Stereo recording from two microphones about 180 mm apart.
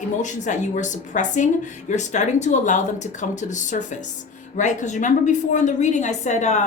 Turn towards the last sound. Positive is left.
turn(degrees=40)  # may be behind; listen again after turning